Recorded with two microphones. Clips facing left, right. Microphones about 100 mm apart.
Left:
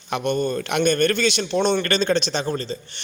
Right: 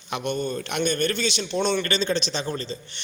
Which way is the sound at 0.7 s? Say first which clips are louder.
Left 6 dB; 90° left.